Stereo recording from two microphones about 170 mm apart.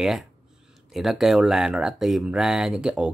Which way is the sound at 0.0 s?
Centre (ahead or behind).